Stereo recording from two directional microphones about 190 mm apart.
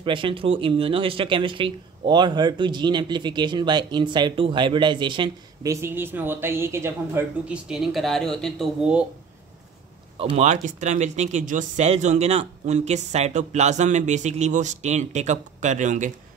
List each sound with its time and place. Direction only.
0.0 s speech: 25° right (ahead or behind); by 9.0 s centre (ahead or behind)
10.1 s speech: 35° right (ahead or behind)